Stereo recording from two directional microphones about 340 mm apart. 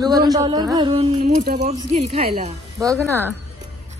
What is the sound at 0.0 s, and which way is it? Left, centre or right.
Speech, centre.